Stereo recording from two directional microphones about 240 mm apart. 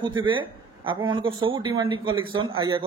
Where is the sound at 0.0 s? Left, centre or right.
Centre.